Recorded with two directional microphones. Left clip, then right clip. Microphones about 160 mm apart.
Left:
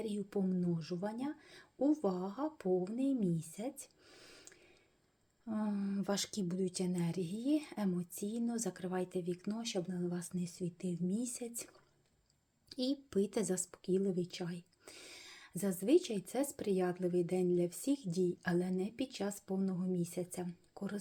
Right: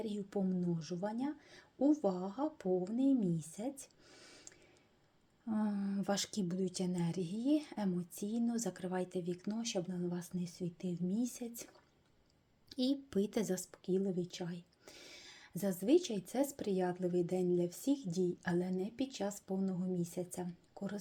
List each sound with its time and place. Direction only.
0.0 s speech: centre (ahead or behind)